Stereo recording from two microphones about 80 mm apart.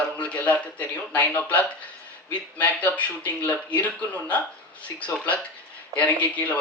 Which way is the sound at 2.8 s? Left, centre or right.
Centre.